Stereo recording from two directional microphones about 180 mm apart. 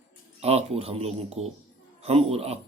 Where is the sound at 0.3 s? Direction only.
35° right (ahead or behind).